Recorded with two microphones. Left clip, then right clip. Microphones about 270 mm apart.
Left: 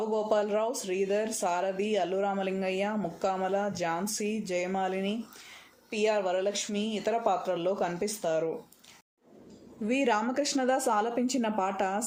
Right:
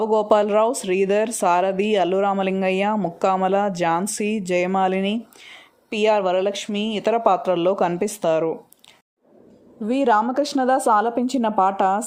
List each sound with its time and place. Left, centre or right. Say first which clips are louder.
0.0 s speech: right 10 dB; right
9.9 s speech: right 9 dB; right